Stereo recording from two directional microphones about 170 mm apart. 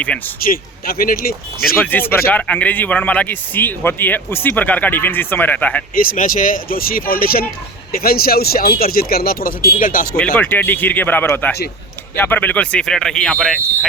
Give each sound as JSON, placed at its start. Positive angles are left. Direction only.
{"t": 0.3, "sound": "speech", "side_deg": 60}
{"t": 1.6, "sound": "speech", "side_deg": 10}
{"t": 5.9, "sound": "speech", "side_deg": 55}
{"t": 10.3, "sound": "speech", "side_deg": 10}